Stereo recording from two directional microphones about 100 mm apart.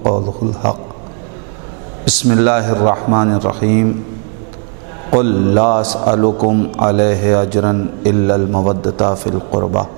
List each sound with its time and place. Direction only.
2.0 s speech: 10° right (ahead or behind)
5.1 s speech: 15° right (ahead or behind)